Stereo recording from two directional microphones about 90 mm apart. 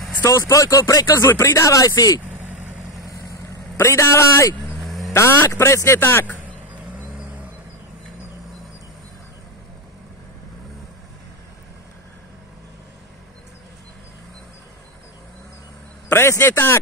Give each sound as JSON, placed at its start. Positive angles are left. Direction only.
{"t": 0.2, "sound": "speech", "side_deg": 35}
{"t": 2.3, "sound": "vehicle", "side_deg": -20}
{"t": 3.7, "sound": "speech", "side_deg": 30}
{"t": 4.8, "sound": "vehicle", "side_deg": 0}
{"t": 5.1, "sound": "speech", "side_deg": 30}
{"t": 16.1, "sound": "a man's voice", "side_deg": 30}